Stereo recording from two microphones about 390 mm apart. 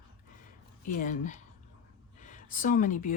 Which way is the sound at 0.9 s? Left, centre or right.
Centre.